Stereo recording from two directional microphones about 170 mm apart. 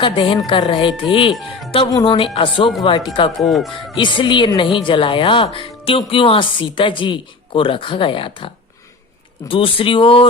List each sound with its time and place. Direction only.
0.0 s speech: 25° left (ahead or behind)
1.3 s speech: centre (ahead or behind)
1.9 s speech: 25° left (ahead or behind)
3.4 s speech: centre (ahead or behind)
3.9 s speech: 30° left (ahead or behind)
9.5 s speech: 30° left (ahead or behind)